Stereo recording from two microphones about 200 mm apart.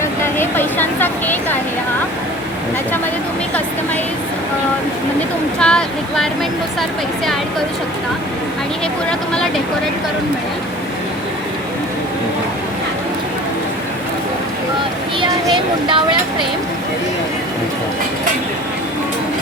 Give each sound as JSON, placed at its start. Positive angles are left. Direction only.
{"t": 0.3, "sound": "speech", "side_deg": 10}
{"t": 5.5, "sound": "speech", "side_deg": 5}
{"t": 15.5, "sound": "speech", "side_deg": -25}